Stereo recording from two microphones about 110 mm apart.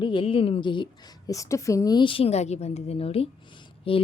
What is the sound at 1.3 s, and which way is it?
Speech, 30° left (ahead or behind).